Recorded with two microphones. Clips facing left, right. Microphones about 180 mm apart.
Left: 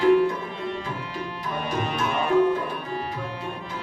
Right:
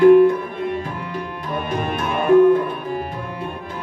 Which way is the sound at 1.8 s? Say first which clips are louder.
Right 1 dB; 55° right (ahead or behind).